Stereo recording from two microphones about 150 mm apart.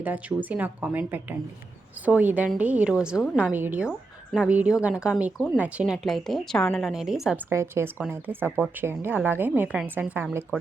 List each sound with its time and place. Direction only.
0.0 s a woman's voice: 10° right (ahead or behind)
7.5 s a woman's voice: 20° right (ahead or behind)